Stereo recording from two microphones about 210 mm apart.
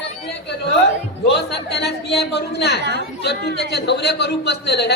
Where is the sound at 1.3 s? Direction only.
55° left (ahead or behind).